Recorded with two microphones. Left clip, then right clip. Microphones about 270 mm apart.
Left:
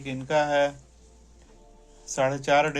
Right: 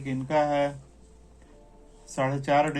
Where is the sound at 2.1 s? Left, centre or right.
Left.